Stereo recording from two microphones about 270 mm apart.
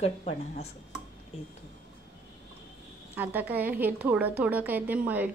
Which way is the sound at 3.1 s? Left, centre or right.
Centre.